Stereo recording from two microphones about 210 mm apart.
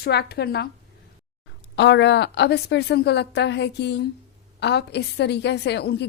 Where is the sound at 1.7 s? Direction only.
55° left (ahead or behind).